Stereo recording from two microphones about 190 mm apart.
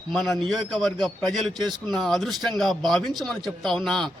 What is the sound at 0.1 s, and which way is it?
Speech, centre (ahead or behind).